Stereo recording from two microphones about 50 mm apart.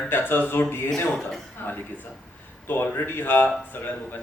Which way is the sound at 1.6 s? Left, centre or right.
Left.